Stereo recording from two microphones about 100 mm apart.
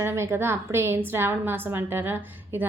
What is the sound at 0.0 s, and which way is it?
A woman's voice, 25° right (ahead or behind).